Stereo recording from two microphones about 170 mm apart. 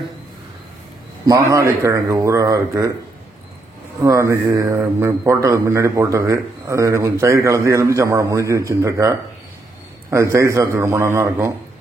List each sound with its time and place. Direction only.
1.2 s a man's voice: 20° right (ahead or behind)
4.0 s a man's voice: 20° right (ahead or behind)
10.1 s a man's voice: 15° right (ahead or behind)